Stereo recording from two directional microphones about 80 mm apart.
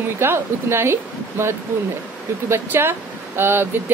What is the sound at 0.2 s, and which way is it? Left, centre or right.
Speech, right.